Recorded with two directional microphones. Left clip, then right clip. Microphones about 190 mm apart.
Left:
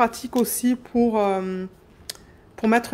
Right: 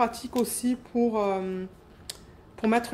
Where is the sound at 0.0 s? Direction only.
35° left (ahead or behind).